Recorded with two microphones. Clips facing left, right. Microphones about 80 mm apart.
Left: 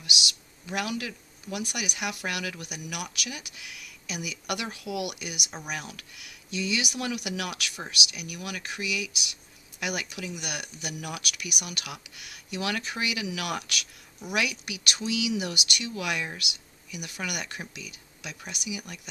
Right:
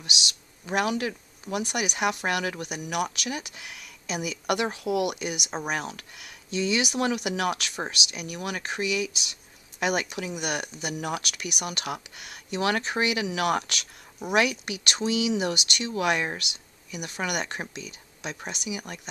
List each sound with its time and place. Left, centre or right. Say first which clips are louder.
0.7 s speech: right 6 dB; right